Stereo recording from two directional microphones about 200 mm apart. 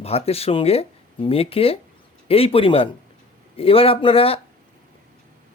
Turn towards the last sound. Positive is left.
turn(degrees=30)  # may be behind; listen again after turning